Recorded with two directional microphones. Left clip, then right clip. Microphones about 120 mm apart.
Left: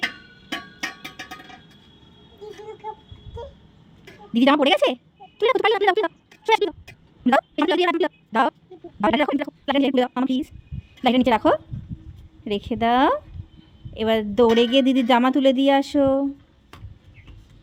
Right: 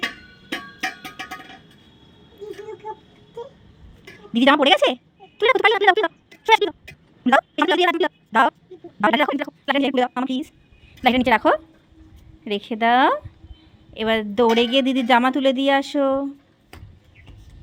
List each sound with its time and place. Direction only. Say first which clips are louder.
4.3 s a woman's voice: right 2 dB; 10° left (ahead or behind)
5.4 s a sound: right 2 dB; 10° left (ahead or behind)
7.3 s a woman's voice: right 2 dB; 15° left (ahead or behind)